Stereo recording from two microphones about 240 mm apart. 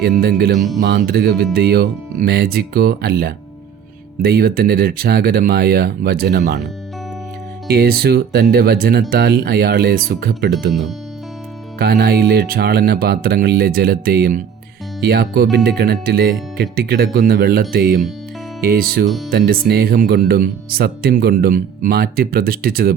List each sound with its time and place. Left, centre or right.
0.2 s speech: right
0.5 s speech: centre
0.8 s music: right
1.5 s speech: right
7.7 s speech: right
11.8 s speech: right